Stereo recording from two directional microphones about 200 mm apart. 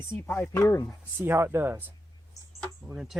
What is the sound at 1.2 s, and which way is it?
Speech, 10° right (ahead or behind).